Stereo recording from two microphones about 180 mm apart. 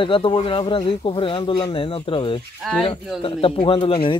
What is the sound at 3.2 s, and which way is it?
Speech, 30° left (ahead or behind).